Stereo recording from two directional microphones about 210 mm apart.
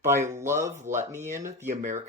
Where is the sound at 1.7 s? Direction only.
35° right (ahead or behind).